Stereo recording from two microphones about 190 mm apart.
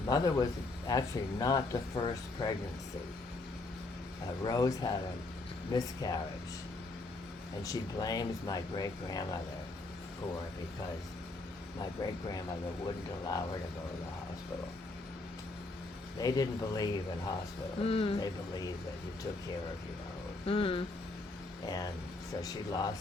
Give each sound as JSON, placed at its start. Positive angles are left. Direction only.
{"t": 0.1, "sound": "speech", "side_deg": 20}
{"t": 4.4, "sound": "speech", "side_deg": 20}
{"t": 7.6, "sound": "speech", "side_deg": 20}
{"t": 11.8, "sound": "speech", "side_deg": 20}
{"t": 16.1, "sound": "speech", "side_deg": 20}
{"t": 20.5, "sound": "speech", "side_deg": 30}